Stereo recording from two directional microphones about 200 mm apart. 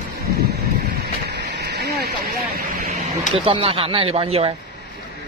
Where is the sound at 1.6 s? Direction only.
55° right (ahead or behind).